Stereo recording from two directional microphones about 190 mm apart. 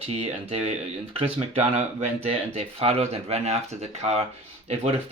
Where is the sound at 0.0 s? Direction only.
30° right (ahead or behind).